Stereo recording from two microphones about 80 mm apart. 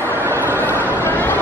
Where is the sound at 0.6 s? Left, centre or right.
Left.